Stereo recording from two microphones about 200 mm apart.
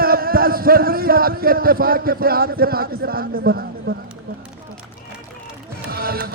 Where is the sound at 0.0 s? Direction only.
50° right (ahead or behind).